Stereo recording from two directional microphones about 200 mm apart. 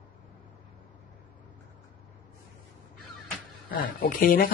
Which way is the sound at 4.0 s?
45° left (ahead or behind).